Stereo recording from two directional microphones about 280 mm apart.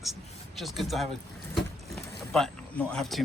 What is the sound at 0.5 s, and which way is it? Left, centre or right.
Speech, centre.